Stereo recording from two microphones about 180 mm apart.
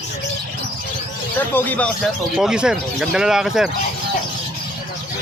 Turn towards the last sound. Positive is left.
turn(degrees=0)  # may be behind; listen again after turning